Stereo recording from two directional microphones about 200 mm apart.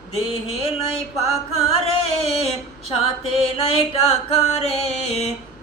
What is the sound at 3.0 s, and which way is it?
Mantra, 30° left (ahead or behind).